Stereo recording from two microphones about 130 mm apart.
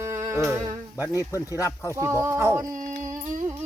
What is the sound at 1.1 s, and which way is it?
Speech, 25° left (ahead or behind).